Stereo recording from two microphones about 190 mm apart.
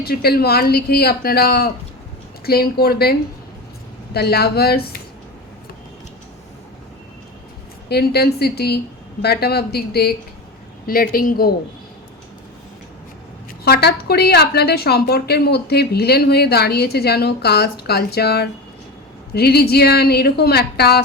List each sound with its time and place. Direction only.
0.0 s a woman's voice: 55° left (ahead or behind)
7.9 s a woman's voice: 55° left (ahead or behind)
13.7 s a woman's voice: 55° left (ahead or behind)